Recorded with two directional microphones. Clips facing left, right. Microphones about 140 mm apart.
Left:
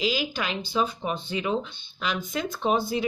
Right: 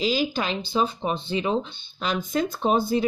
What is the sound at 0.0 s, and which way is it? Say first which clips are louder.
A woman's voice: right 3 dB; 35° right (ahead or behind).